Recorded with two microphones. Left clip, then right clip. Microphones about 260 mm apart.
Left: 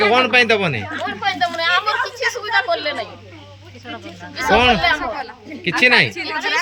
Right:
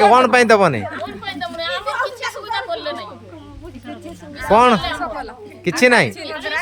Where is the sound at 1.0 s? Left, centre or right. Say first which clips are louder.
Left 7 dB; centre.